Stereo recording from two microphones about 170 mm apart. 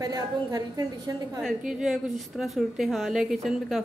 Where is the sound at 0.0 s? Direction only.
20° right (ahead or behind).